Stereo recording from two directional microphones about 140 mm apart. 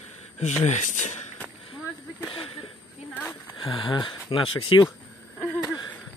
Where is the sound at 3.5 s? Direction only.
35° left (ahead or behind).